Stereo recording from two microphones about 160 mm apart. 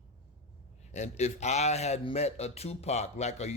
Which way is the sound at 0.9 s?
45° left (ahead or behind).